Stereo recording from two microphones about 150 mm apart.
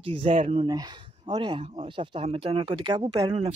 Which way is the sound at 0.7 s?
25° right (ahead or behind).